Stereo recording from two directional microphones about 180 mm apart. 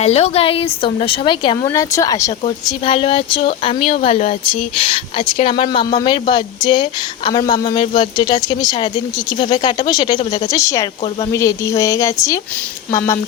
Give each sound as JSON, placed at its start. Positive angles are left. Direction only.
{"t": 0.0, "sound": "a woman's voice", "side_deg": 35}
{"t": 2.6, "sound": "a woman's voice", "side_deg": 30}